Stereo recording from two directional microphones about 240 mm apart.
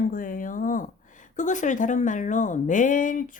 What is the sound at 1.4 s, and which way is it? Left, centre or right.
Speech, left.